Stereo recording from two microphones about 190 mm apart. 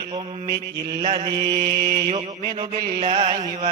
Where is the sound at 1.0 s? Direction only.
30° right (ahead or behind).